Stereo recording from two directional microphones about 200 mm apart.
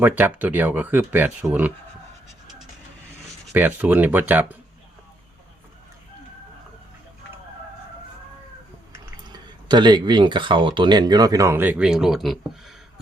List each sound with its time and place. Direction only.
0.0 s speech: 10° right (ahead or behind)
3.5 s speech: 10° right (ahead or behind)
9.6 s speech: 20° right (ahead or behind); by 12.7 s centre (ahead or behind)